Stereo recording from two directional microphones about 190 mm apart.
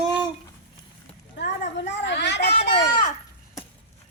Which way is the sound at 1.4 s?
65° left (ahead or behind).